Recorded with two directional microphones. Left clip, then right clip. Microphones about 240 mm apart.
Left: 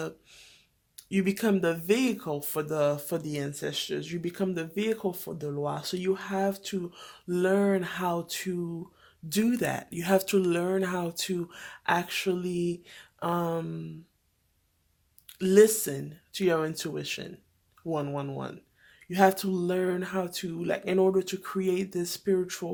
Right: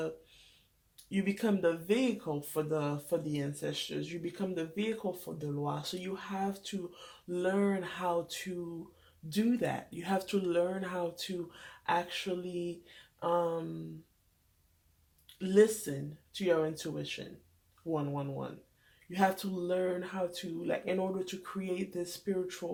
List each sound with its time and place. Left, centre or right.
1.1 s speech: left
15.4 s speech: left